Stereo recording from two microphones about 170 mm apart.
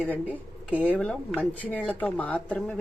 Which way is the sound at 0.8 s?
5° left (ahead or behind).